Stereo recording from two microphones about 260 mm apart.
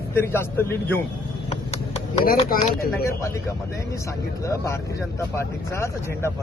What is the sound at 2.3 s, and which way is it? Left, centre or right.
Speech, left.